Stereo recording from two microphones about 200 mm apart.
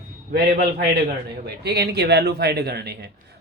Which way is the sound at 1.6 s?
55° right (ahead or behind).